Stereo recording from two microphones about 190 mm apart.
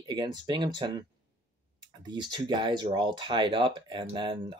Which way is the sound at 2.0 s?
25° right (ahead or behind).